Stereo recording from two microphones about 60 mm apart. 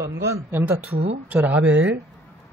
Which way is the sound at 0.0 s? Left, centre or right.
Right.